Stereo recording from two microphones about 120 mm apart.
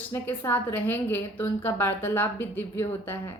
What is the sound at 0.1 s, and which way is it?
A woman's voice, 15° left (ahead or behind).